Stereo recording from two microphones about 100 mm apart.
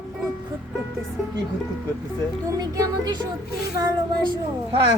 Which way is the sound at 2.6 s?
40° right (ahead or behind).